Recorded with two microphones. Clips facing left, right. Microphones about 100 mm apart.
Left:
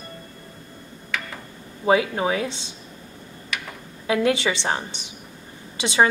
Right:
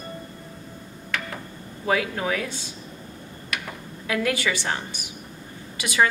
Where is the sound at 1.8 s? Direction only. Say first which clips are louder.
Left 5 dB; 20° left (ahead or behind).